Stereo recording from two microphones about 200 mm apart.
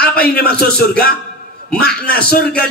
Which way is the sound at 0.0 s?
50° left (ahead or behind).